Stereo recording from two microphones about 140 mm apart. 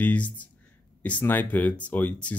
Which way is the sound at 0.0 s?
10° left (ahead or behind).